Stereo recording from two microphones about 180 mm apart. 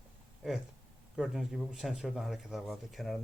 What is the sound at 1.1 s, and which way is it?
A man's voice, centre (ahead or behind).